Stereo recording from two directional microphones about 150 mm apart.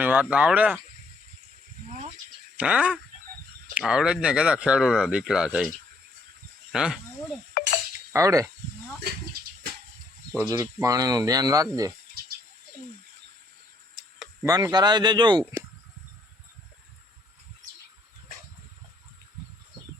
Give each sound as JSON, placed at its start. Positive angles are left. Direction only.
{"t": 0.0, "sound": "speech", "side_deg": -10}
{"t": 2.6, "sound": "speech", "side_deg": -5}
{"t": 7.6, "sound": "cutlery", "side_deg": 70}
{"t": 8.1, "sound": "speech", "side_deg": -20}
{"t": 10.4, "sound": "speech", "side_deg": -20}
{"t": 14.4, "sound": "speech", "side_deg": -25}